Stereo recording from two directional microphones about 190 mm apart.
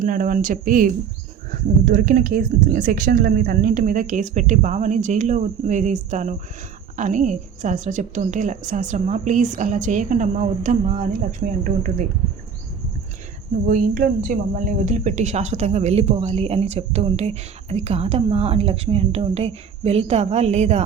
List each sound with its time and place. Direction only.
0.0 s speech: 45° right (ahead or behind)
13.7 s speech: 45° right (ahead or behind)